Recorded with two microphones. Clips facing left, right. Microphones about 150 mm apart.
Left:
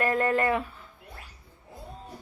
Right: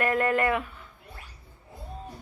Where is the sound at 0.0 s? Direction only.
30° left (ahead or behind).